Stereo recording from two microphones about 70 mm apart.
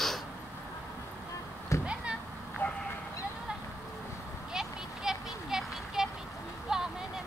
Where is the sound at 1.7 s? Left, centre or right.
Left.